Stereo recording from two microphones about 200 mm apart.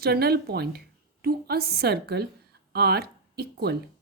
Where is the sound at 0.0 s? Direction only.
50° right (ahead or behind).